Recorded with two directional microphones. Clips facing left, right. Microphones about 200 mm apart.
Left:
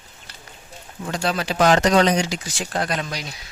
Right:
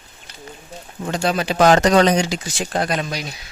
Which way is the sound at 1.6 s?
40° right (ahead or behind).